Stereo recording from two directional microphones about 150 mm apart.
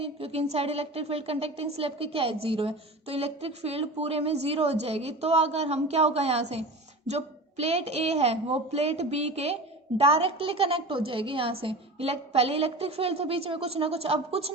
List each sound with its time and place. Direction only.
0.0 s a woman's voice: 40° right (ahead or behind)